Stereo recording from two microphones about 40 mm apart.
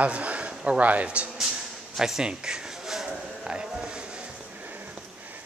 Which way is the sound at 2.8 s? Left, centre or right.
Centre.